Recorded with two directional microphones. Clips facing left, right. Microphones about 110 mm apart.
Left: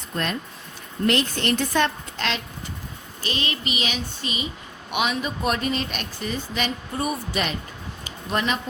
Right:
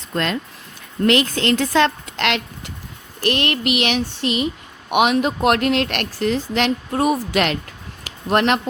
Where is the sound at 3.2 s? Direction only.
70° right (ahead or behind); by 7.6 s 90° right.